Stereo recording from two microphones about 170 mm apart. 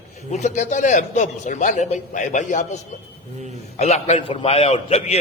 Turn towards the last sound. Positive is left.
turn(degrees=35)  # may be behind; listen again after turning